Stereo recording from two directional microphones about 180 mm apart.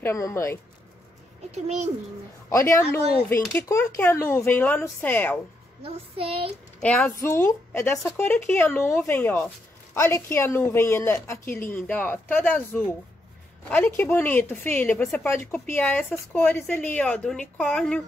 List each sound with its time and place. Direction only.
0.0 s a woman's voice: 15° left (ahead or behind)
1.5 s child singing: 40° right (ahead or behind)
2.5 s a woman's voice: 15° left (ahead or behind)
5.8 s child singing: 30° right (ahead or behind)
6.8 s a woman's voice: 5° left (ahead or behind)